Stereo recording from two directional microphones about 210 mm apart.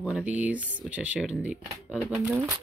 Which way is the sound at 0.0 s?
5° right (ahead or behind).